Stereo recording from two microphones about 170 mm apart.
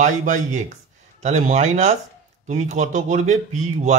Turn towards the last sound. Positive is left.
turn(degrees=-45)  # may be behind; listen again after turning